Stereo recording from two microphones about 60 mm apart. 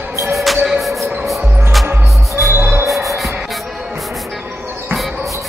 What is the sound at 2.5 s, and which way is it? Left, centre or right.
Music, right.